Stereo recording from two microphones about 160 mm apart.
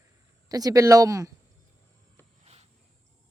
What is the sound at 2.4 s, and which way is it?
Cricket, 40° right (ahead or behind).